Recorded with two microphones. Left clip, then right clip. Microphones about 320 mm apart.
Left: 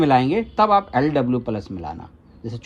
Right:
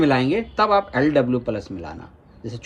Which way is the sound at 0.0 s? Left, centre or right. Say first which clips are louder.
Left 2 dB; centre.